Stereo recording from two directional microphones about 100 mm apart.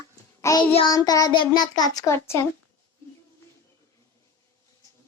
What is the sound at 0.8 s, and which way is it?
Child singing, 40° left (ahead or behind).